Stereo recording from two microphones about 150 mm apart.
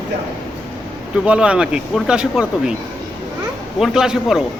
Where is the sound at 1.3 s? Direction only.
5° right (ahead or behind).